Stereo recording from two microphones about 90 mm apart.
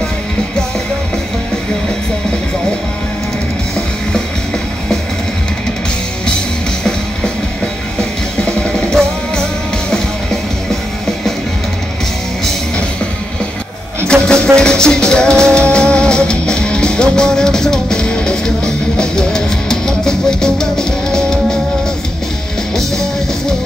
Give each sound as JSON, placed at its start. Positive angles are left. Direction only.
{"t": 8.0, "sound": "music", "side_deg": 5}
{"t": 14.2, "sound": "music", "side_deg": 10}